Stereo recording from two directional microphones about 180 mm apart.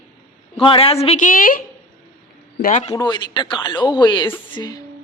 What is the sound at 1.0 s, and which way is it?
Speech, 40° left (ahead or behind).